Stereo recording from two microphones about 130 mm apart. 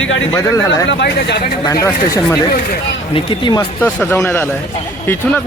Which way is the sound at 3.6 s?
15° left (ahead or behind).